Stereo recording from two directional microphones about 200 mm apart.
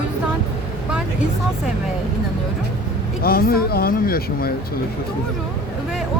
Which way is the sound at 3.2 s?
50° left (ahead or behind).